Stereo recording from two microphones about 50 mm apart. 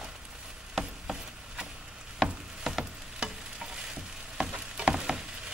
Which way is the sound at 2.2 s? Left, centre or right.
Centre.